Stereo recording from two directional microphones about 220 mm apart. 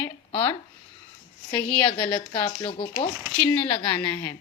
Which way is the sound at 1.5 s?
5° left (ahead or behind).